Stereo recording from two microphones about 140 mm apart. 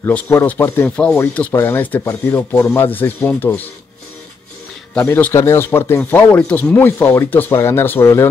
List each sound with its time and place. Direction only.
0.1 s speech: 15° left (ahead or behind)
4.9 s speech: 15° left (ahead or behind)